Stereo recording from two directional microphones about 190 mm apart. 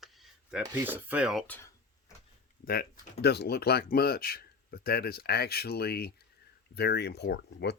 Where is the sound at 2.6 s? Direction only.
55° left (ahead or behind).